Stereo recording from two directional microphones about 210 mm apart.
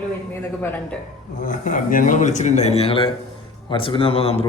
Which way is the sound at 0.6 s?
10° left (ahead or behind).